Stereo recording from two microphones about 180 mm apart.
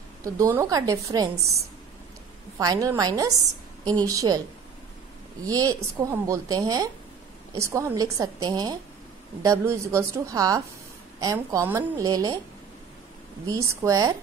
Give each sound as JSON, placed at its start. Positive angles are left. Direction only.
{"t": 0.2, "sound": "a woman's voice", "side_deg": -20}
{"t": 2.6, "sound": "a woman's voice", "side_deg": -20}
{"t": 5.4, "sound": "a woman's voice", "side_deg": -20}
{"t": 13.5, "sound": "a woman's voice", "side_deg": -15}